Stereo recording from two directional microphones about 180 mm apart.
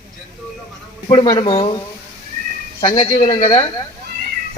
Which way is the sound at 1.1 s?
25° left (ahead or behind).